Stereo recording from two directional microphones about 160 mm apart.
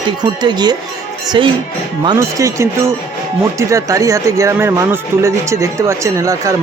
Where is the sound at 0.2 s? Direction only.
25° right (ahead or behind).